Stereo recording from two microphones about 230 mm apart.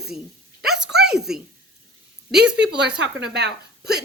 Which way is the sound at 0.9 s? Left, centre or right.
Right.